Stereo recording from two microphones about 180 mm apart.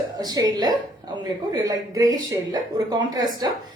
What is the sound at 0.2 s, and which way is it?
Speech, 20° right (ahead or behind).